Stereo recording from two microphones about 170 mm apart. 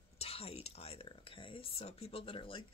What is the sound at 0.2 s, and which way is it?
A woman's voice, 35° left (ahead or behind).